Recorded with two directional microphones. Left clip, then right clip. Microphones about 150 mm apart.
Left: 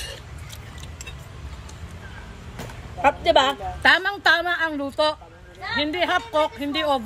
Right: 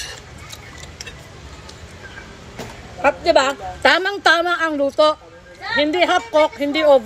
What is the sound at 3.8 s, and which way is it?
Speech, 30° left (ahead or behind).